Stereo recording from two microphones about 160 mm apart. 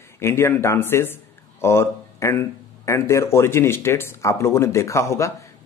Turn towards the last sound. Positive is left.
turn(degrees=20)  # may be behind; listen again after turning